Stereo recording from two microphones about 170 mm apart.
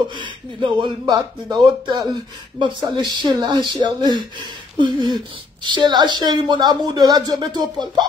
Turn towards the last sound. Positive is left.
turn(degrees=-25)  # may be behind; listen again after turning